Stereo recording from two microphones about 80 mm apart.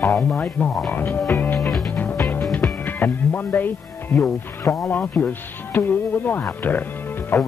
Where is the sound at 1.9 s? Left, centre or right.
Left.